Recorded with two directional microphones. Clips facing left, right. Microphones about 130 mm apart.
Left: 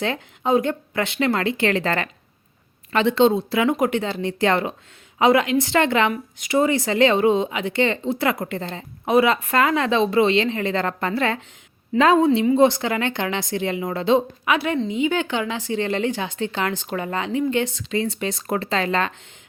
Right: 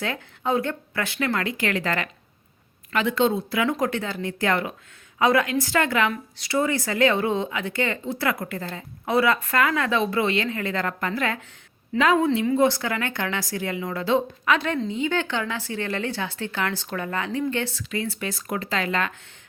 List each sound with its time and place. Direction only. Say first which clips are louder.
0.0 s speech: left 4 dB; 20° left (ahead or behind)